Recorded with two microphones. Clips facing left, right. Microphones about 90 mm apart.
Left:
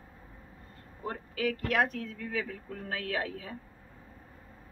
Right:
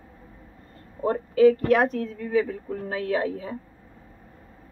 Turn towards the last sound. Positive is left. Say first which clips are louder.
# right 9 dB
turn(degrees=-30)  # may be behind; listen again after turning